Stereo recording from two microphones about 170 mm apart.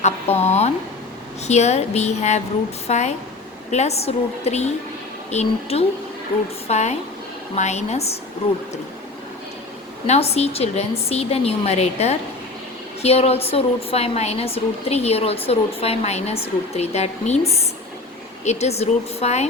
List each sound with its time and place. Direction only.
0.0 s a woman's voice: 40° left (ahead or behind)
10.1 s a woman's voice: 40° left (ahead or behind)